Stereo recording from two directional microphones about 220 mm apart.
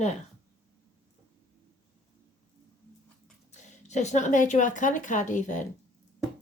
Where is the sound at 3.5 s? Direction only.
30° left (ahead or behind).